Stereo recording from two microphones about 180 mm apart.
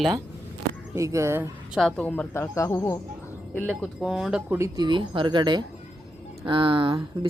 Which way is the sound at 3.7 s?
5° right (ahead or behind).